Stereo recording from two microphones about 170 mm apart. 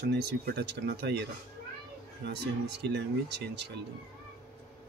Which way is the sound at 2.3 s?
80° right.